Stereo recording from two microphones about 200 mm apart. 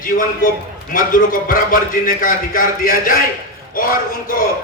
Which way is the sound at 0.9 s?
45° left (ahead or behind).